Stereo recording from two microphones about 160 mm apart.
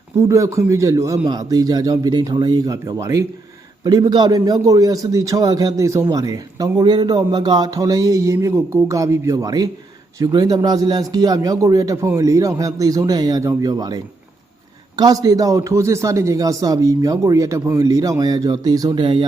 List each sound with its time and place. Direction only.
0.2 s a man's voice: 20° right (ahead or behind)